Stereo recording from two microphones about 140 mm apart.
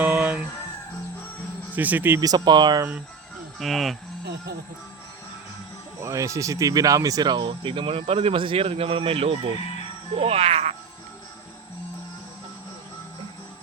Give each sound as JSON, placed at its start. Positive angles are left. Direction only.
{"t": 0.0, "sound": "music", "side_deg": -5}
{"t": 1.7, "sound": "speech", "side_deg": -10}
{"t": 2.2, "sound": "speech", "side_deg": -30}
{"t": 3.6, "sound": "speech", "side_deg": 0}
{"t": 6.0, "sound": "speech", "side_deg": -20}